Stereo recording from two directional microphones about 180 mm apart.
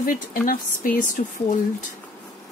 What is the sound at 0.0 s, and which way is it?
A woman's voice, 50° left (ahead or behind).